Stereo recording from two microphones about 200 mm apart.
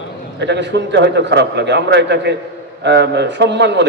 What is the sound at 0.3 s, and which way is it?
A man's voice, 60° right (ahead or behind).